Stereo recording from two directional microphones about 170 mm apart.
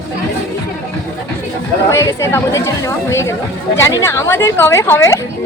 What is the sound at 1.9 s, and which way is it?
Speech, 15° left (ahead or behind).